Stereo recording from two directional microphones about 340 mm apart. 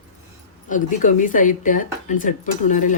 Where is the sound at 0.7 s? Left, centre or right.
Left.